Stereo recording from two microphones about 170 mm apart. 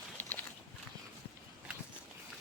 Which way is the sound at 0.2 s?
10° left (ahead or behind).